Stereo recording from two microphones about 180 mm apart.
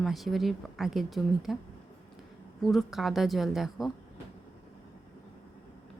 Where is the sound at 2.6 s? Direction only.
Centre (ahead or behind).